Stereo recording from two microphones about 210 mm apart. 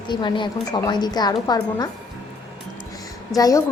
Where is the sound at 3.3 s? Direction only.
15° left (ahead or behind).